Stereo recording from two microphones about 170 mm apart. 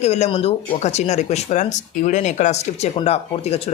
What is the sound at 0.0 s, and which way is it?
A man's voice, 40° left (ahead or behind).